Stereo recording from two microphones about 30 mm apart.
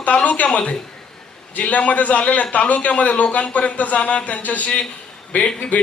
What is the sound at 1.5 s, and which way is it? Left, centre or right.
A man's voice, left.